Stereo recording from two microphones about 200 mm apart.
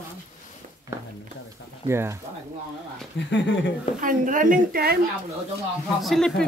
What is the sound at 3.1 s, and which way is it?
Speech, 60° left (ahead or behind).